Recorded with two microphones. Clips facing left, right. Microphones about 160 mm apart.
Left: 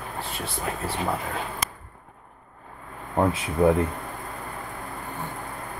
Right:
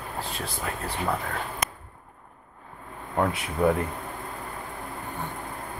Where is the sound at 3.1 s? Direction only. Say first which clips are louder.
Left 3 dB; 20° left (ahead or behind).